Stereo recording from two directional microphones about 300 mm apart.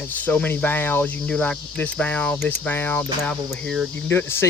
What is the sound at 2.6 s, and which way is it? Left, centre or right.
Speech, centre.